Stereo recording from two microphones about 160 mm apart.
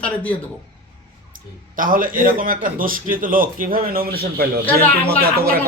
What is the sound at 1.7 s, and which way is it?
A man's voice, 60° right (ahead or behind).